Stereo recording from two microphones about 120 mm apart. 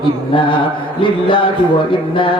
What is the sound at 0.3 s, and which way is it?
Speech, 45° left (ahead or behind).